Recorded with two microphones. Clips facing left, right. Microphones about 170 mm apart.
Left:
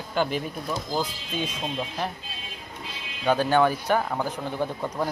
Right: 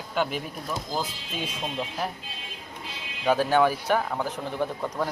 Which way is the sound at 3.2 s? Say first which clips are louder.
Even; 5° right (ahead or behind).